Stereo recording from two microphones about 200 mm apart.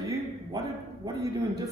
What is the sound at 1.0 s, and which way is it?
Speech, 15° right (ahead or behind).